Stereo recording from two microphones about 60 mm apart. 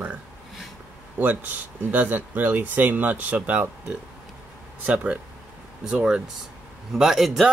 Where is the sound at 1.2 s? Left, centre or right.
Right.